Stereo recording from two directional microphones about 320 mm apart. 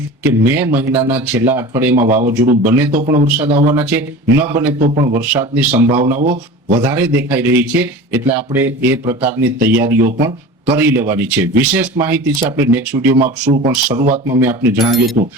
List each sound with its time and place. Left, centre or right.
0.2 s a man's voice: centre
6.1 s speech: right
6.7 s a man's voice: centre
13.1 s speech: right
13.7 s a man's voice: centre